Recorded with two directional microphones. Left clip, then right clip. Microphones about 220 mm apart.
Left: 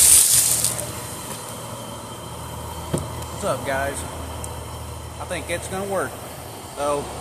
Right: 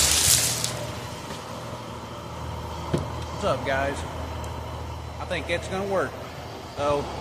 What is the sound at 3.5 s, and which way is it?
Speech, 5° left (ahead or behind).